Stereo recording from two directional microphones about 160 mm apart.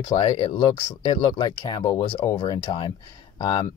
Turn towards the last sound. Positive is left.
turn(degrees=30)  # may be behind; listen again after turning